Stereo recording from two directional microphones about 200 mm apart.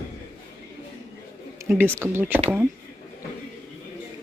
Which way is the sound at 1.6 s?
10° right (ahead or behind).